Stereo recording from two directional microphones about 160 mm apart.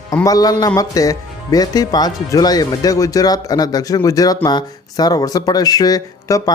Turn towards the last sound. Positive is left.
turn(degrees=25)  # may be behind; listen again after turning